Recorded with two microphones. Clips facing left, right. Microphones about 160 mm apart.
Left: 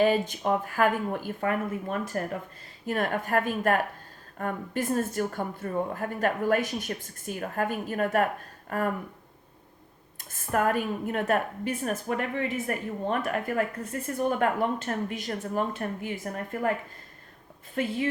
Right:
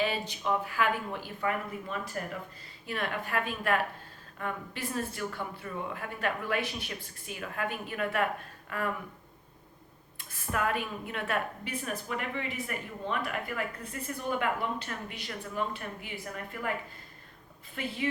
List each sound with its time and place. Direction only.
0.0 s a woman's voice: 50° left (ahead or behind)
10.2 s a woman's voice: 45° left (ahead or behind)
17.7 s a woman's voice: 45° left (ahead or behind)